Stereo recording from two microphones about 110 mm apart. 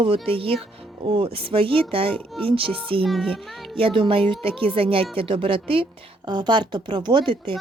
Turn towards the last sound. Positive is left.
turn(degrees=-50)  # may be behind; listen again after turning